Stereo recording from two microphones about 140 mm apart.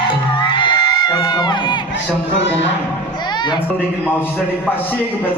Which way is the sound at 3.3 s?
35° left (ahead or behind).